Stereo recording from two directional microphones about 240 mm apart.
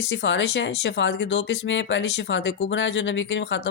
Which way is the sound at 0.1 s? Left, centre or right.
Left.